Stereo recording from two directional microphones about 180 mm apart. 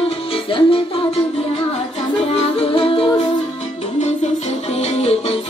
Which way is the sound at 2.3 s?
30° left (ahead or behind).